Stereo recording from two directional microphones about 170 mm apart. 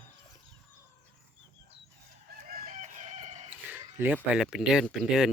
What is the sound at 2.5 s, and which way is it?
Chicken, 50° right (ahead or behind).